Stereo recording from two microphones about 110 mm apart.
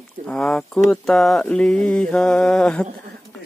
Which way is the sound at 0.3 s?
5° left (ahead or behind).